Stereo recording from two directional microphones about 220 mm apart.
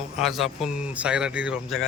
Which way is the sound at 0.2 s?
Centre (ahead or behind).